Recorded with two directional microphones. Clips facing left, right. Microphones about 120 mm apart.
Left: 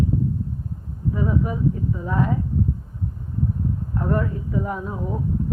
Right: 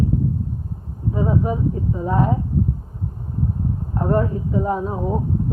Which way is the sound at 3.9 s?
30° right (ahead or behind).